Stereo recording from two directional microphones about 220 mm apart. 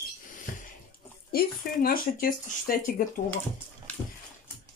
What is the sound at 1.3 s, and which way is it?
Speech, 40° left (ahead or behind).